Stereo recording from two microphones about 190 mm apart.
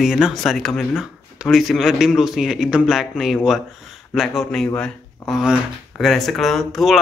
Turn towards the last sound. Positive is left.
turn(degrees=0)  # may be behind; listen again after turning